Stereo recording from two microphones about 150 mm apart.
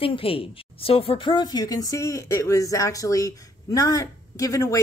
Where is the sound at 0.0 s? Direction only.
40° left (ahead or behind).